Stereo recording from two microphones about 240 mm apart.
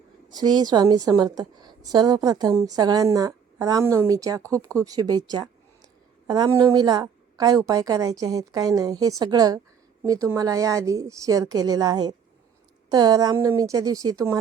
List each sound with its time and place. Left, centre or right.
0.3 s a woman's voice: centre